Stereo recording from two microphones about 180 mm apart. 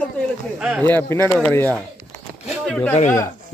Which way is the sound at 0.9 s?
15° left (ahead or behind).